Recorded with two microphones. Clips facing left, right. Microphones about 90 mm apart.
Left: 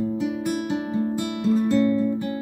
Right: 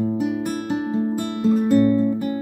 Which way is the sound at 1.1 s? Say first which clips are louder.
Right 2 dB; 45° right (ahead or behind).